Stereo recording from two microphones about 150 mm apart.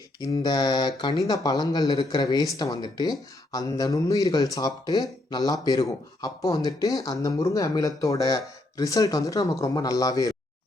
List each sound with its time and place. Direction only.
0.2 s speech: 25° left (ahead or behind)